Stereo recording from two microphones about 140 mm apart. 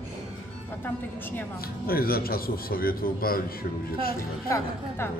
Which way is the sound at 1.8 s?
90° left.